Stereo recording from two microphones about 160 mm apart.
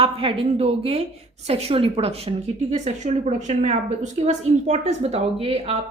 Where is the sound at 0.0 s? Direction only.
35° right (ahead or behind).